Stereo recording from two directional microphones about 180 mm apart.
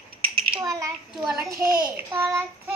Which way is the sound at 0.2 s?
30° right (ahead or behind).